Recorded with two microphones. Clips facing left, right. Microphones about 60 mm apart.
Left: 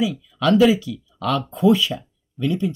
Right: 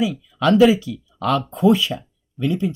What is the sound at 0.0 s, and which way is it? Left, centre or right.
Speech, right.